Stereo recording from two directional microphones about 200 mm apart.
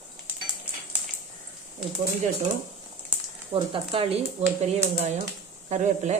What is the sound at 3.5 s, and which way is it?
Speech, 25° right (ahead or behind).